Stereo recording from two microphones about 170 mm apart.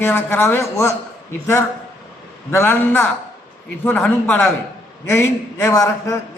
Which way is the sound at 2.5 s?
15° left (ahead or behind).